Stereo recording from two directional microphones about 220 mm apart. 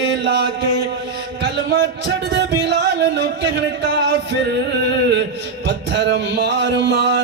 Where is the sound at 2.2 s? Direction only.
55° right (ahead or behind).